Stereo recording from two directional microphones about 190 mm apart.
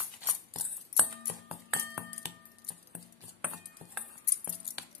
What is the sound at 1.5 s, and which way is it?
Music, centre (ahead or behind).